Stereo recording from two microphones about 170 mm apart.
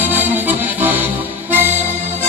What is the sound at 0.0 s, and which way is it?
Accordion, 10° right (ahead or behind).